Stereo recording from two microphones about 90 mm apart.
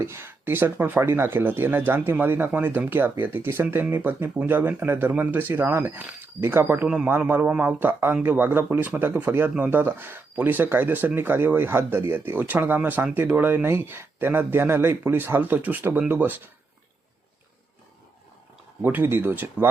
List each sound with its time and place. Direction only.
0.0 s speech: 30° right (ahead or behind)
6.8 s a man's voice: 15° right (ahead or behind)
18.8 s speech: 20° right (ahead or behind)